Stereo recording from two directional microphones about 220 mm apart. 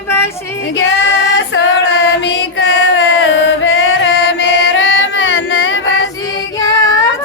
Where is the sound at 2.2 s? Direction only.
55° left (ahead or behind).